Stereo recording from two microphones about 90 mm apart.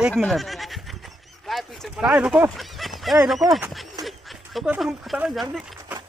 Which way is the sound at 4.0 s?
Centre (ahead or behind).